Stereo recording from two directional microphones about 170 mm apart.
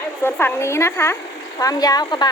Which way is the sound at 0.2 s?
15° left (ahead or behind).